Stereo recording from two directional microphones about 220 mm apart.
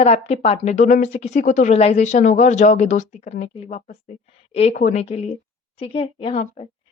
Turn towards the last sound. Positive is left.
turn(degrees=30)  # may be behind; listen again after turning